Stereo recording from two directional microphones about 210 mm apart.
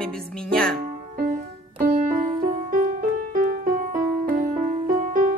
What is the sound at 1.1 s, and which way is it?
Music, 40° right (ahead or behind).